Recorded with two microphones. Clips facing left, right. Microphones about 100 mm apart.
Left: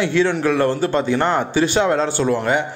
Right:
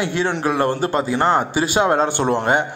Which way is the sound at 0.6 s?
40° right (ahead or behind).